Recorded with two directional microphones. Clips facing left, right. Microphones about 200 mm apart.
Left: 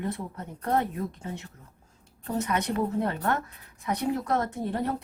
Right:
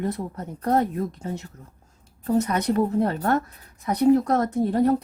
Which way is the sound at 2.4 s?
40° right (ahead or behind).